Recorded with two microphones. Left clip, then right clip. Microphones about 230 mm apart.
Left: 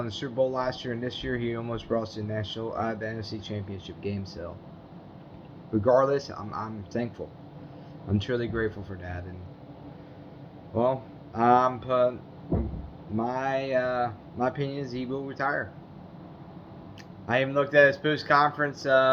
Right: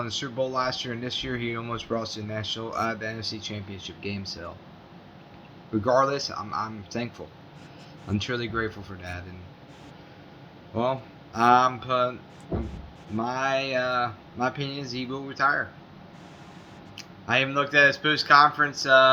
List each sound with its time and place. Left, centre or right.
0.2 s speech: right
3.8 s speech: centre
5.7 s speech: right
8.3 s speech: right
11.3 s speech: right
13.1 s speech: right
17.2 s speech: right